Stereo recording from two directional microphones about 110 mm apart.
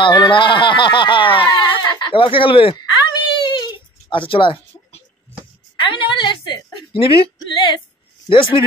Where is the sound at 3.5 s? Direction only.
45° left (ahead or behind).